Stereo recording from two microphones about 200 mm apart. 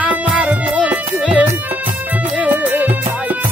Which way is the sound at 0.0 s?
5° right (ahead or behind).